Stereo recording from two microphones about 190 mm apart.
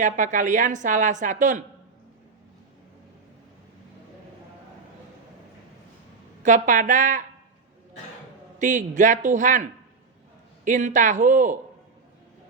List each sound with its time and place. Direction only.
0.0 s a woman's voice: 40° right (ahead or behind)
6.4 s speech: 40° right (ahead or behind)
8.5 s a woman's voice: 40° right (ahead or behind)